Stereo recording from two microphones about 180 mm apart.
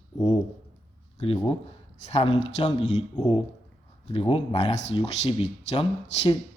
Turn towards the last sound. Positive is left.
turn(degrees=35)  # may be behind; listen again after turning